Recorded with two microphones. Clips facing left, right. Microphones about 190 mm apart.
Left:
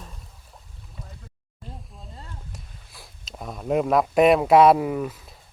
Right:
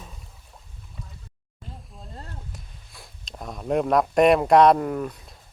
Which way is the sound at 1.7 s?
Centre (ahead or behind).